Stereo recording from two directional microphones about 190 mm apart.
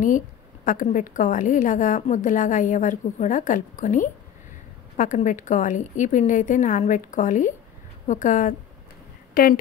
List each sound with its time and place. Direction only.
0.7 s a woman's voice: 45° left (ahead or behind)